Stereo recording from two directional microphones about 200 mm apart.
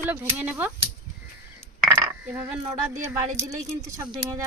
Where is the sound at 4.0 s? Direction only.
15° right (ahead or behind).